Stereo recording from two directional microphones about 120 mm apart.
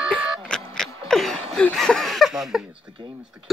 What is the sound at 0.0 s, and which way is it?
Music, 5° right (ahead or behind).